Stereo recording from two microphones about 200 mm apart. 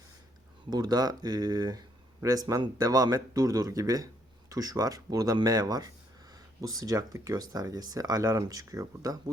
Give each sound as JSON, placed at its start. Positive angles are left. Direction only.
{"t": 0.7, "sound": "speech", "side_deg": -20}